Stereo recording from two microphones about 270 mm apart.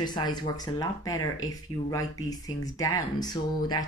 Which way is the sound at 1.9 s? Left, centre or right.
Centre.